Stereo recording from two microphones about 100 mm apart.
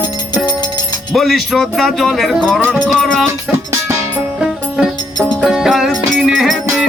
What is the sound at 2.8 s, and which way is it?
Speech, 5° left (ahead or behind).